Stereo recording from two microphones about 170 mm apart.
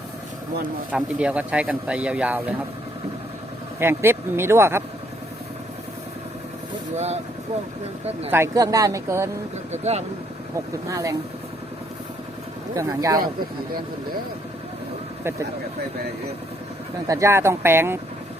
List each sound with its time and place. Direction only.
0.9 s speech: 5° right (ahead or behind)
3.8 s speech: 15° right (ahead or behind)
6.9 s speech: 40° right (ahead or behind)
8.3 s speech: 15° right (ahead or behind)
9.7 s speech: 40° right (ahead or behind)
10.5 s speech: 20° right (ahead or behind)
12.7 s speech: 20° right (ahead or behind)
15.2 s speech: 15° right (ahead or behind)
17.1 s speech: 15° right (ahead or behind)